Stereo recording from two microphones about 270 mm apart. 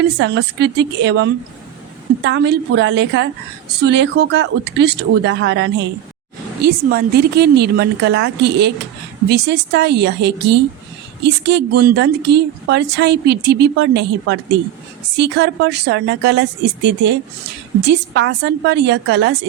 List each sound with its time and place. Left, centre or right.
0.2 s a woman's voice: right